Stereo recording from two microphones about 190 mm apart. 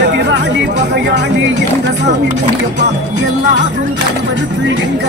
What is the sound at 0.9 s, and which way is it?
Speech, 65° right (ahead or behind).